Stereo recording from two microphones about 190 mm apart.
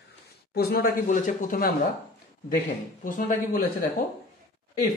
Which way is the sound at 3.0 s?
50° left (ahead or behind).